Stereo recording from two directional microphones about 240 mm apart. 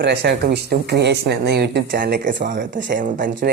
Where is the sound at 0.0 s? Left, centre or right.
Right.